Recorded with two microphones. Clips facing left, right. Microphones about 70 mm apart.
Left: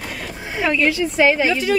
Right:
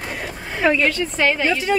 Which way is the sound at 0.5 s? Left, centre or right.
Centre.